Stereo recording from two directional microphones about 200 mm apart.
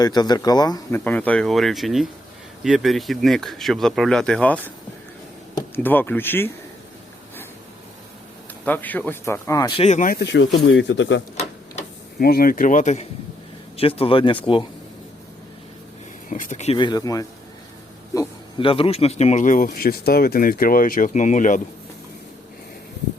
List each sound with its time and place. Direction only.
0.0 s speech: 20° left (ahead or behind)
5.7 s speech: 10° left (ahead or behind)
8.6 s speech: 10° left (ahead or behind)
9.8 s speech: 40° left (ahead or behind); by 11.2 s 65° left (ahead or behind)
12.2 s speech: 50° left (ahead or behind); by 14.7 s 25° left (ahead or behind)
16.3 s speech: 40° left (ahead or behind)
16.7 s speech: 20° left (ahead or behind); by 21.6 s 40° left (ahead or behind)